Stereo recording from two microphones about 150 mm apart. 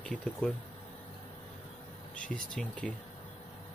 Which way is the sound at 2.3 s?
10° left (ahead or behind).